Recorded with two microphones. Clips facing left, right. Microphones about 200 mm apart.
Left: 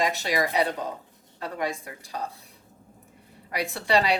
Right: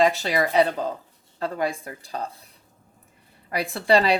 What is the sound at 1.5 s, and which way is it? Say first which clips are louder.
Speech: right 4 dB; 30° right (ahead or behind).